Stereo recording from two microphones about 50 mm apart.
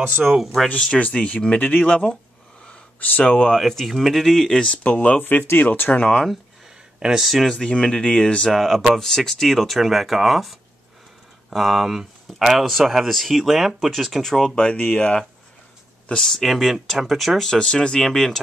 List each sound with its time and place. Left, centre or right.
0.4 s speech: centre
0.9 s speech: left
1.6 s speech: left
2.6 s a sound: left
3.5 s speech: centre
4.6 s speech: left
7.0 s speech: centre
7.5 s speech: centre
8.5 s speech: centre
14.6 s speech: left
16.2 s speech: centre
17.5 s speech: centre